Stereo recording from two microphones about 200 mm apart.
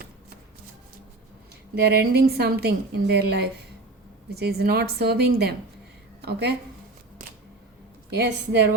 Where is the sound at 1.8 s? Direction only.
55° right (ahead or behind).